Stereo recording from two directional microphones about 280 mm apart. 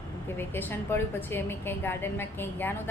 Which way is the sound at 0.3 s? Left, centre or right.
Centre.